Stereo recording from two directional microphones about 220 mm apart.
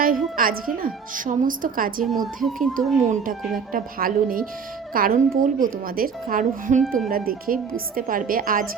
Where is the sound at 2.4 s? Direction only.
Centre (ahead or behind).